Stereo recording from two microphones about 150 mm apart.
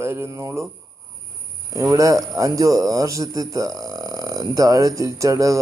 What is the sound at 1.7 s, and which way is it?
Speech, 20° right (ahead or behind).